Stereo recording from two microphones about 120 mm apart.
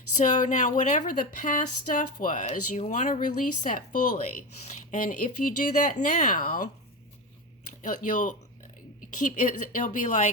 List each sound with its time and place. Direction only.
0.1 s a woman's voice: 90° left
7.7 s a woman's voice: 90° left